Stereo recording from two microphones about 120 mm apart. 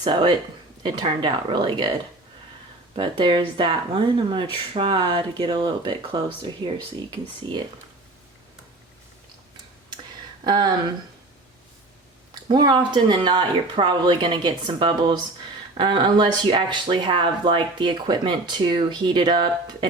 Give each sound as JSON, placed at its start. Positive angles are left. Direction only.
{"t": 0.0, "sound": "speech", "side_deg": -40}
{"t": 2.9, "sound": "speech", "side_deg": -45}
{"t": 10.4, "sound": "speech", "side_deg": -35}
{"t": 12.3, "sound": "speech", "side_deg": -40}